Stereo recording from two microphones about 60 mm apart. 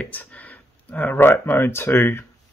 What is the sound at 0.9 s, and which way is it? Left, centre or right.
Speech, left.